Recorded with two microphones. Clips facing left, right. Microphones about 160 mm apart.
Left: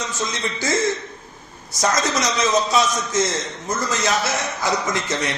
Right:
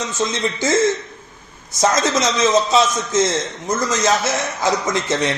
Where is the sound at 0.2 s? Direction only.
20° right (ahead or behind).